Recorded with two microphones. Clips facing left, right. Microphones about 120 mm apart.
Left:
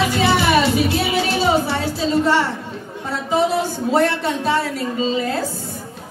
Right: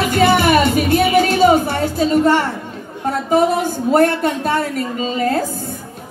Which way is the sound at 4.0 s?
50° right (ahead or behind).